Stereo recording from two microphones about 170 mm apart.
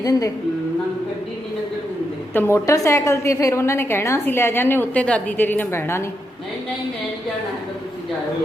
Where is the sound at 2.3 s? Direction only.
15° left (ahead or behind).